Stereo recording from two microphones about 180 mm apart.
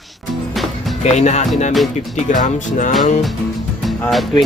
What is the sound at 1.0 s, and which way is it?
Speech, 40° left (ahead or behind).